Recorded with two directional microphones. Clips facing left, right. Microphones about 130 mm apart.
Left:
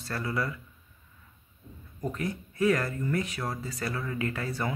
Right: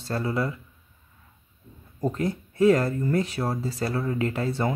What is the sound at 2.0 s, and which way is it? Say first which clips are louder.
Speech: right 6 dB; 30° right (ahead or behind).